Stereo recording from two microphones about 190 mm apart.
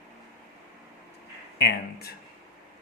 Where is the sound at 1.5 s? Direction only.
55° left (ahead or behind).